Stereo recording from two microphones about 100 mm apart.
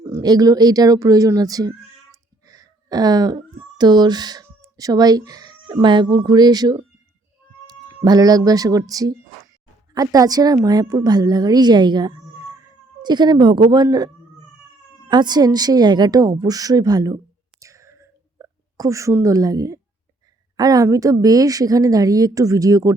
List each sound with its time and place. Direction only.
0.0 s a woman's voice: 35° right (ahead or behind)
8.0 s a woman's voice: 40° right (ahead or behind)
17.6 s whispering: 30° right (ahead or behind)
20.6 s a woman's voice: 40° right (ahead or behind)